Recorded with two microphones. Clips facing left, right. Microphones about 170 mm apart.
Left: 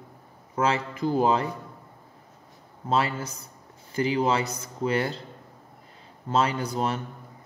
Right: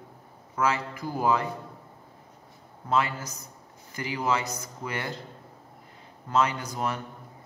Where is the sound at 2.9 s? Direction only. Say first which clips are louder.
Left 1 dB; 30° left (ahead or behind).